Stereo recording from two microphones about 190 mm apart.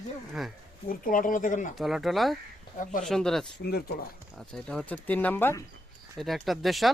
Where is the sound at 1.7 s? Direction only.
Centre (ahead or behind).